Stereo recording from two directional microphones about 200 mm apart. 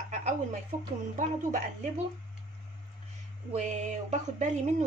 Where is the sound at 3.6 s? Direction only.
35° right (ahead or behind).